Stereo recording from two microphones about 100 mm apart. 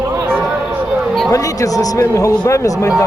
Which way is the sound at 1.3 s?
35° left (ahead or behind).